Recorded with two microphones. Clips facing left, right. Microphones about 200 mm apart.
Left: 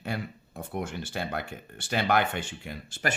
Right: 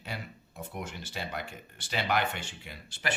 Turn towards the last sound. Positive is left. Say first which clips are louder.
# left 4 dB
turn(degrees=45)  # may be behind; listen again after turning